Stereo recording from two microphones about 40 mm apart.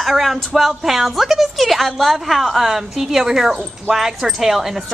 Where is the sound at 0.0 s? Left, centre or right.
Centre.